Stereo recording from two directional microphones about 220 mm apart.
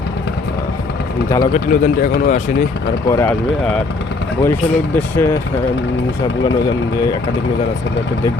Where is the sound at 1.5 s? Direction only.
35° left (ahead or behind).